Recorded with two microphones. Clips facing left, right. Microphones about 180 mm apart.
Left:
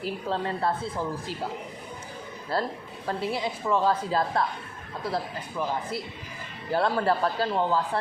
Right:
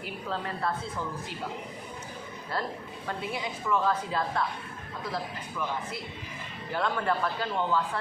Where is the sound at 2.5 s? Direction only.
30° left (ahead or behind).